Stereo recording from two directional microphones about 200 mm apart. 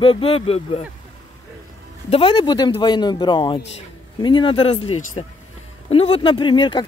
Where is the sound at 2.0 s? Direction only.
25° left (ahead or behind).